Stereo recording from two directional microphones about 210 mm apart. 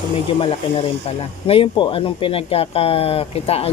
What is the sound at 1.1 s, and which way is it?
Speech, 25° left (ahead or behind).